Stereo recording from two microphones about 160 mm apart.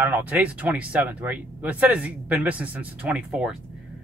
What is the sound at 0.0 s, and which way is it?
Speech, 10° right (ahead or behind).